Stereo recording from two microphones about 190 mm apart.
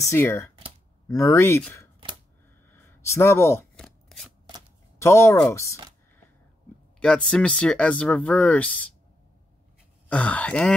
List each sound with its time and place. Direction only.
0.0 s speech: 10° left (ahead or behind)
2.7 s a sound: 15° left (ahead or behind)
3.7 s shuffling cards: centre (ahead or behind)
4.9 s speech: 15° left (ahead or behind)
7.0 s speech: 5° left (ahead or behind)
10.0 s speech: 10° left (ahead or behind)